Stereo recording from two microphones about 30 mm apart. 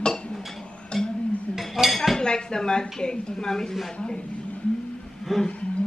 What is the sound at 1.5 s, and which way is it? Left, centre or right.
Dishes, centre.